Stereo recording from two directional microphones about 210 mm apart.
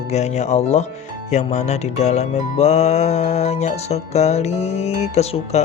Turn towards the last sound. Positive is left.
turn(degrees=30)  # may be behind; listen again after turning